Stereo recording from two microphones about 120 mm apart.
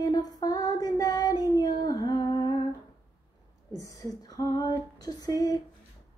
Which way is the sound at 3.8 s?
30° left (ahead or behind).